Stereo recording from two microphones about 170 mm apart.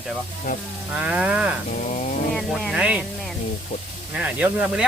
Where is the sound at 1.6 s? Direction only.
45° left (ahead or behind).